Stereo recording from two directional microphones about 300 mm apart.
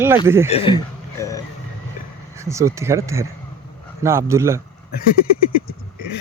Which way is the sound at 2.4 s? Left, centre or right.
Centre.